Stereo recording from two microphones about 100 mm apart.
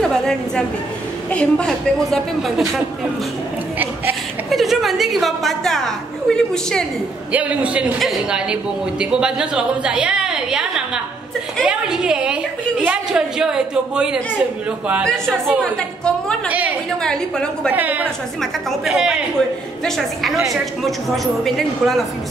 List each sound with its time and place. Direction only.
0.0 s a woman's voice: 5° left (ahead or behind)
4.5 s a woman's voice: centre (ahead or behind)
7.3 s a woman's voice: 15° right (ahead or behind)
8.0 s a woman's voice: centre (ahead or behind)
15.0 s a woman's voice: 5° left (ahead or behind)
16.4 s a woman's voice: 15° right (ahead or behind)
17.0 s a woman's voice: 5° left (ahead or behind)
17.6 s a woman's voice: 15° right (ahead or behind)
18.4 s a woman's voice: centre (ahead or behind)